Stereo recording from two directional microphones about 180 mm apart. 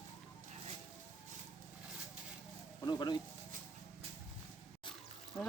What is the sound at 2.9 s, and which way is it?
Speech, 25° left (ahead or behind).